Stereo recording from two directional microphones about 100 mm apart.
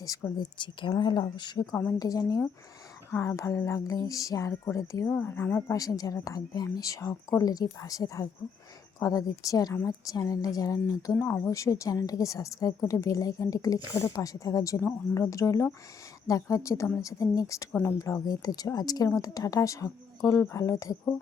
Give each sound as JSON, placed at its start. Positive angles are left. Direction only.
{"t": 0.0, "sound": "speech", "side_deg": 35}
{"t": 0.6, "sound": "speech", "side_deg": 50}
{"t": 1.9, "sound": "a woman's voice", "side_deg": 35}
{"t": 5.0, "sound": "speech", "side_deg": 20}
{"t": 5.7, "sound": "a woman's voice", "side_deg": 35}